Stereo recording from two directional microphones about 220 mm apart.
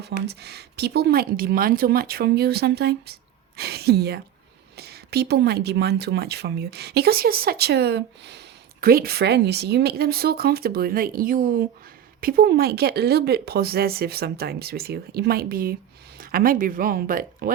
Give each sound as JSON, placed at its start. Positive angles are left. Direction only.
{"t": 0.0, "sound": "speech", "side_deg": -50}